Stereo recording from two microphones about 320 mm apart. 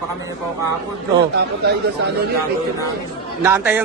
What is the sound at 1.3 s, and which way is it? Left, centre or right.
Speech, right.